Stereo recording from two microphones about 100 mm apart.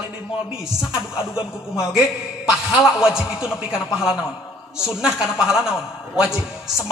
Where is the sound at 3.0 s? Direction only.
5° right (ahead or behind).